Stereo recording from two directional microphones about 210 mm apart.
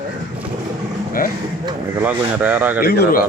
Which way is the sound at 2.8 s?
50° left (ahead or behind).